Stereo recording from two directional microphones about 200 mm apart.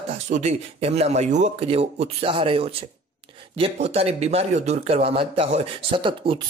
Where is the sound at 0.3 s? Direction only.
35° right (ahead or behind).